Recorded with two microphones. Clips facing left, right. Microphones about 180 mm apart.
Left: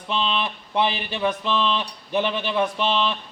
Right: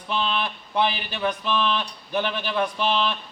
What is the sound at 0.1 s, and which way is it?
A man's voice, 20° left (ahead or behind).